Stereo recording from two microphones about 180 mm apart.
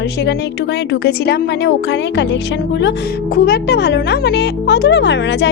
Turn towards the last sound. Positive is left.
turn(degrees=75)  # may be behind; listen again after turning